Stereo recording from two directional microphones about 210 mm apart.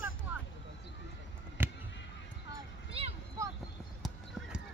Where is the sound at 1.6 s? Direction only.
10° right (ahead or behind).